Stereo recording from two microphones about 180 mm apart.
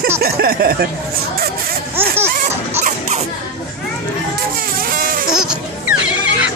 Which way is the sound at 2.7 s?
40° right (ahead or behind).